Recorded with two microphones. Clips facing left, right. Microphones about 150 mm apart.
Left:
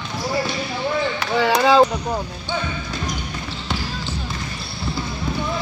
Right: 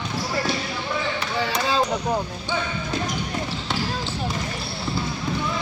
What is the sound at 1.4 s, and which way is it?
Speech, 70° left (ahead or behind).